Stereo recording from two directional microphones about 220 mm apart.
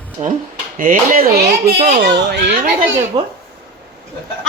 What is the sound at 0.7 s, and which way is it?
A man's voice, 40° right (ahead or behind).